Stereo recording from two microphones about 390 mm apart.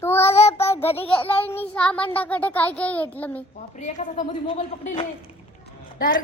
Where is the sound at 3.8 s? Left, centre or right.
Centre.